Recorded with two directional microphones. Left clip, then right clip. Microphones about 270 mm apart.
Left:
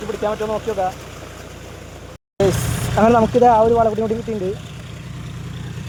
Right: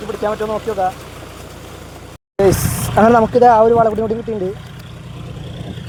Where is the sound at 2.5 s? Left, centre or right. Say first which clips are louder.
Right 4 dB; left.